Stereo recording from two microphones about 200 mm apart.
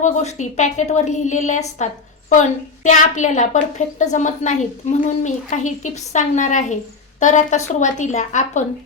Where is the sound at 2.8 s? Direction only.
40° left (ahead or behind).